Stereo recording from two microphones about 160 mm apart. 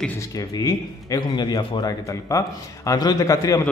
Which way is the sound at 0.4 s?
20° left (ahead or behind).